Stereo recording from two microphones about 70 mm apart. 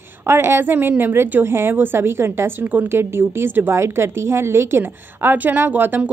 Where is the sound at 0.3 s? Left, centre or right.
Right.